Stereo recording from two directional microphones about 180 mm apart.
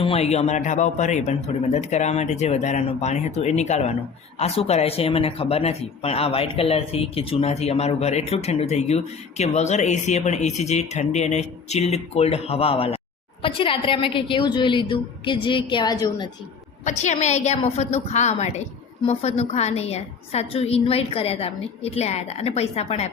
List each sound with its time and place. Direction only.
0.0 s a woman's voice: 35° left (ahead or behind)
17.0 s a woman's voice: 40° left (ahead or behind)